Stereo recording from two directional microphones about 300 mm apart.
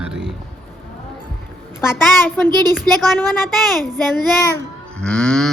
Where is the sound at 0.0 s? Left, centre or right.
Centre.